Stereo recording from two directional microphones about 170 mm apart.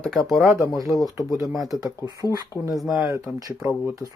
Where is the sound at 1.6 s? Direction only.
20° right (ahead or behind).